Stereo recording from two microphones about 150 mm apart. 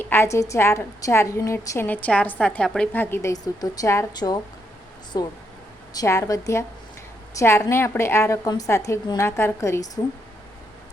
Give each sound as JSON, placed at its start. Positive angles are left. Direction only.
{"t": 0.0, "sound": "a woman's voice", "side_deg": 15}